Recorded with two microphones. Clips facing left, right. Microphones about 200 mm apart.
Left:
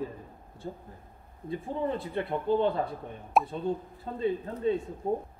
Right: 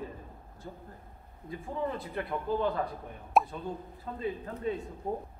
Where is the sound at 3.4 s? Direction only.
Centre (ahead or behind).